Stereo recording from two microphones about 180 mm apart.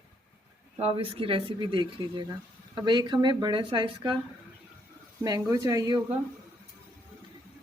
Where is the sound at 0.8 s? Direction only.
30° right (ahead or behind).